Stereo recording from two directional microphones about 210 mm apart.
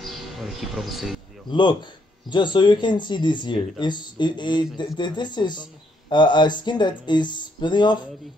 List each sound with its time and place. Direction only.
0.0 s speech: centre (ahead or behind)
1.5 s speech: 20° left (ahead or behind)